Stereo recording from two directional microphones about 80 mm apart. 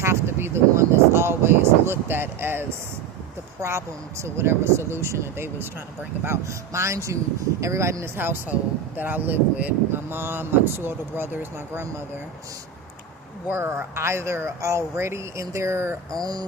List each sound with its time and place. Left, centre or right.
0.0 s a sound: right
3.6 s speech: right
13.5 s speech: right
16.1 s speech: right